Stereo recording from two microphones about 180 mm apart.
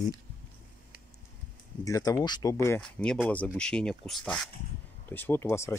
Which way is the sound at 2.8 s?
5° left (ahead or behind).